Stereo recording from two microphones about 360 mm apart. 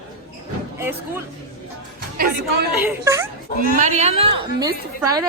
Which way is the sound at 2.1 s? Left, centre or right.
Right.